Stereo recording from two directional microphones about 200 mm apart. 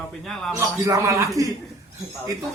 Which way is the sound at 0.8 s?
15° right (ahead or behind).